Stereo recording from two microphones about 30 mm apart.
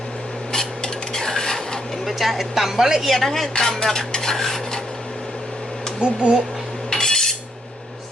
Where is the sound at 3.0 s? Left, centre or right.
Centre.